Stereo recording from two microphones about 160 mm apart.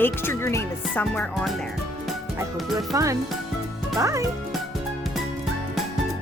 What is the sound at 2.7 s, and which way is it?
Speech, 20° right (ahead or behind).